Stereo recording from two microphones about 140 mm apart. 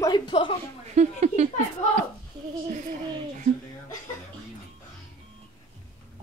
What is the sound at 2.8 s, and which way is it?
Speech, 65° right (ahead or behind).